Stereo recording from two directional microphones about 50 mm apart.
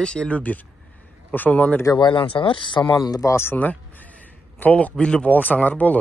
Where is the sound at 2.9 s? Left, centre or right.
Left.